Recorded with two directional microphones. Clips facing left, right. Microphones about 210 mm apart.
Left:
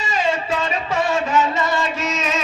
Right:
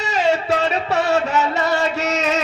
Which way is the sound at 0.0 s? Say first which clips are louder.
Right 3 dB; 70° right (ahead or behind).